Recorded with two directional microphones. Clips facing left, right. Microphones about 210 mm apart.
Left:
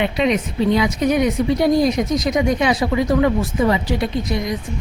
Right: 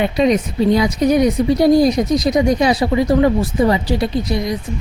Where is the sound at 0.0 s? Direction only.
40° right (ahead or behind).